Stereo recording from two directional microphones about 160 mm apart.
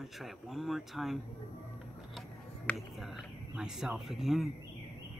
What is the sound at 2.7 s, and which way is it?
Speech, 10° left (ahead or behind).